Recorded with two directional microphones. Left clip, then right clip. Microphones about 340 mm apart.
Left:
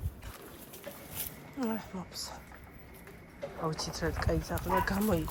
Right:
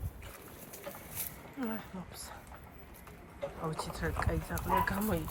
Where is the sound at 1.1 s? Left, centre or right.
Centre.